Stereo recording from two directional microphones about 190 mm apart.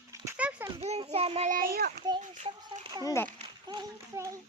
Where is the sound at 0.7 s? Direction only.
35° right (ahead or behind).